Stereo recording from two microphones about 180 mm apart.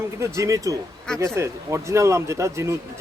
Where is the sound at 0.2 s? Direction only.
15° right (ahead or behind).